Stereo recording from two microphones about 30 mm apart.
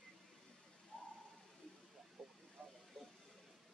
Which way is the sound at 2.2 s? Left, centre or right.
Centre.